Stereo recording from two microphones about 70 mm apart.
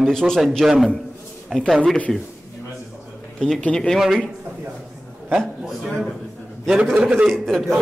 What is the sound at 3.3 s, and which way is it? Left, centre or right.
Speech, centre.